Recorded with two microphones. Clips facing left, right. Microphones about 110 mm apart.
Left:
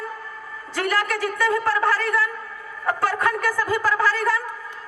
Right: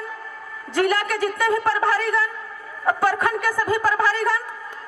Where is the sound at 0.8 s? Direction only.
15° right (ahead or behind).